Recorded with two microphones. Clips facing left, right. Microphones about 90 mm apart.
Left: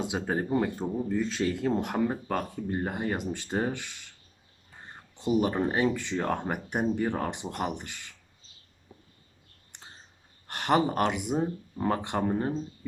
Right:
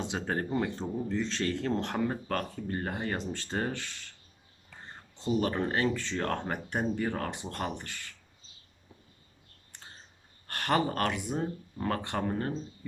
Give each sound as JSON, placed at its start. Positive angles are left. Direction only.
{"t": 0.0, "sound": "speech", "side_deg": 10}
{"t": 5.1, "sound": "speech", "side_deg": 15}
{"t": 9.7, "sound": "a sound", "side_deg": 20}
{"t": 10.4, "sound": "speech", "side_deg": 20}